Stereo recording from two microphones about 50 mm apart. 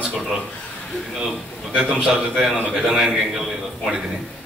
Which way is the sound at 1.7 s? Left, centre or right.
Centre.